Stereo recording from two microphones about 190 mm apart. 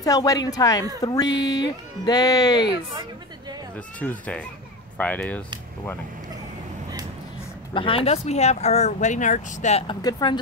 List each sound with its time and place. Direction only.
0.0 s speech: 20° left (ahead or behind)
1.3 s speech: 70° left (ahead or behind)
1.6 s speech: 20° left (ahead or behind)
2.7 s a woman's voice: 20° right (ahead or behind)
3.7 s speech: 10° left (ahead or behind)
7.7 s speech: 30° left (ahead or behind)
10.0 s speech: 25° left (ahead or behind)